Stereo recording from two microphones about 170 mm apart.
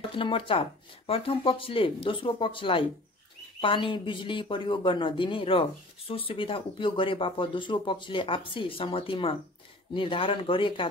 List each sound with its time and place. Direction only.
0.1 s speech: 30° left (ahead or behind)